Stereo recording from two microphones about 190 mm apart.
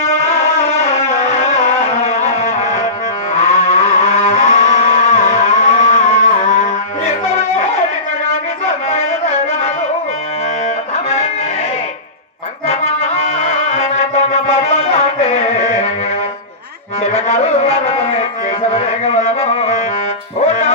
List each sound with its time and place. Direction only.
0.9 s music: 35° left (ahead or behind)
3.4 s a sound: 35° left (ahead or behind)
10.9 s music: 35° left (ahead or behind)
12.6 s music: 35° left (ahead or behind)
17.0 s a sound: 35° left (ahead or behind)
18.7 s music: 35° left (ahead or behind)